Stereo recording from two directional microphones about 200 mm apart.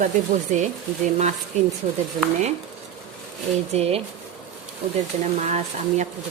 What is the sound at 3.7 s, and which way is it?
Speech, 30° right (ahead or behind).